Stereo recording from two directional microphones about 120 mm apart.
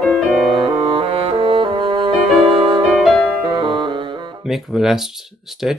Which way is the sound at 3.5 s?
40° right (ahead or behind).